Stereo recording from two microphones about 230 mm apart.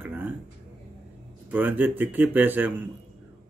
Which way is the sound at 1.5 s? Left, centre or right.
Centre.